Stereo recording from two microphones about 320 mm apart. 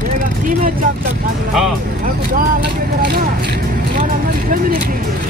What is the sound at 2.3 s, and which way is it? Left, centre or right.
Speech, right.